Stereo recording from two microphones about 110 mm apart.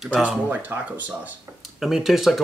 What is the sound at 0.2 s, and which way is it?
Speech, 15° right (ahead or behind).